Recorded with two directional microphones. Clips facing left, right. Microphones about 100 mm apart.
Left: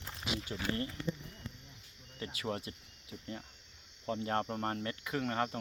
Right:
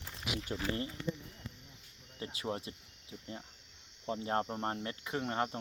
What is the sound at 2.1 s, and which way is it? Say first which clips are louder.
Speech: even; 25° right (ahead or behind).